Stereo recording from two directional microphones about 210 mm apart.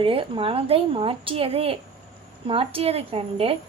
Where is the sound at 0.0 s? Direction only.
25° right (ahead or behind).